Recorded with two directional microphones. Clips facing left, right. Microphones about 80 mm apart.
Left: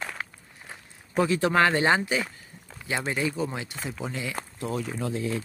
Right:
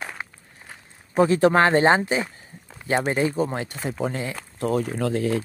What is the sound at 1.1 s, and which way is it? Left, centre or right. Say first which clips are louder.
Speech: right 5 dB; right.